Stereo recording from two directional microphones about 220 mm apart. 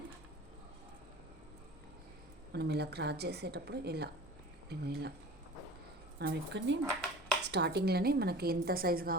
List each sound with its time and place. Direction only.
2.5 s a woman's voice: 50° right (ahead or behind)
6.1 s a woman's voice: 50° right (ahead or behind)